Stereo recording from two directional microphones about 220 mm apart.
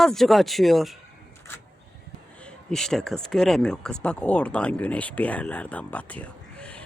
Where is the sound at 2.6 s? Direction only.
Centre (ahead or behind).